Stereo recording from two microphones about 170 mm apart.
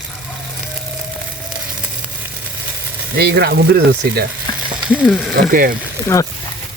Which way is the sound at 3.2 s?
70° right (ahead or behind).